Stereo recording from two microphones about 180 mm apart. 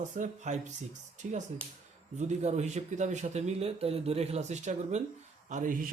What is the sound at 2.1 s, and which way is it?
A man's voice, 40° right (ahead or behind).